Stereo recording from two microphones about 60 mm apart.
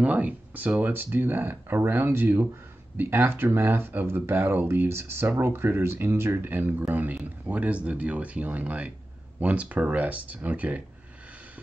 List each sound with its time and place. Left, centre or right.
0.0 s speech: right
0.9 s speech: right